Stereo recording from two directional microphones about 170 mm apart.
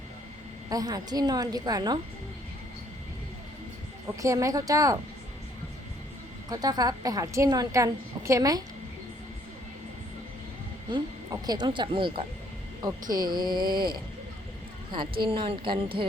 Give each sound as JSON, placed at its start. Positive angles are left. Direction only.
{"t": 0.7, "sound": "a woman's voice", "side_deg": -20}
{"t": 4.2, "sound": "a woman's voice", "side_deg": -20}
{"t": 6.5, "sound": "a woman's voice", "side_deg": -20}
{"t": 10.8, "sound": "a woman's voice", "side_deg": -25}